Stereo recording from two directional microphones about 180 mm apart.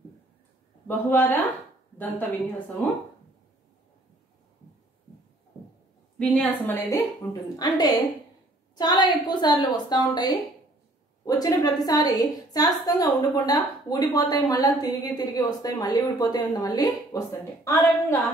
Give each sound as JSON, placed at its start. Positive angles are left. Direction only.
{"t": 0.8, "sound": "a woman's voice", "side_deg": 10}
{"t": 6.1, "sound": "a woman's voice", "side_deg": 10}